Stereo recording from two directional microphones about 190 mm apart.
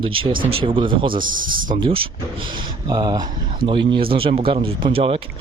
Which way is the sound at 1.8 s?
30° right (ahead or behind).